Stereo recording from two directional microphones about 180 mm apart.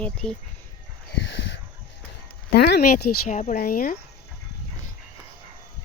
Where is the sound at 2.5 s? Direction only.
60° left (ahead or behind).